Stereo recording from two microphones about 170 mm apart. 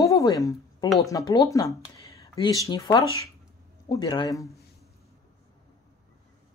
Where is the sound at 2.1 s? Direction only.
20° left (ahead or behind).